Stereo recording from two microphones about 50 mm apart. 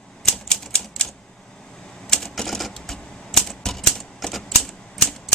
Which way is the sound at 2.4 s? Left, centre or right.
Centre.